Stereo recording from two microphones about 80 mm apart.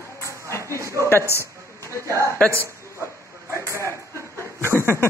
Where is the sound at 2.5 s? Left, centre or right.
Right.